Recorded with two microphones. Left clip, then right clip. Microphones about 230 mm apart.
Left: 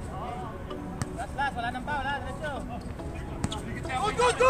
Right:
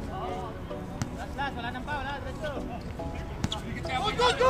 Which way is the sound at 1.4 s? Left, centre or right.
Left.